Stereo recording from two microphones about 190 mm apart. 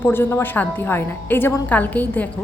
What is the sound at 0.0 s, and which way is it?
A woman's voice, 10° left (ahead or behind).